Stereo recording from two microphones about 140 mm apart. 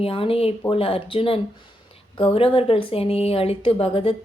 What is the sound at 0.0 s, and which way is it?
A woman's voice, 40° left (ahead or behind).